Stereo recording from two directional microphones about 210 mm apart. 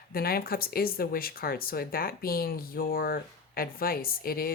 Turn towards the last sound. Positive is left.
turn(degrees=45)  # may be behind; listen again after turning